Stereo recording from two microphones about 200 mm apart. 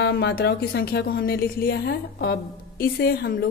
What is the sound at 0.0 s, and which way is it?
Speech, 55° left (ahead or behind).